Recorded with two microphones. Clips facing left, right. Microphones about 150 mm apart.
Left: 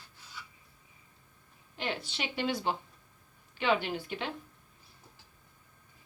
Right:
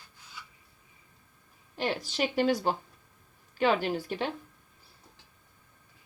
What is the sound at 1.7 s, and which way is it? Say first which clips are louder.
A woman's voice: right 5 dB; 40° right (ahead or behind).